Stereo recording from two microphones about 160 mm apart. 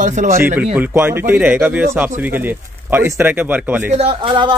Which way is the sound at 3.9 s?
40° right (ahead or behind).